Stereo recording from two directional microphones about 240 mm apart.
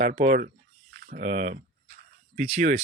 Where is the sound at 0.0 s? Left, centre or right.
Right.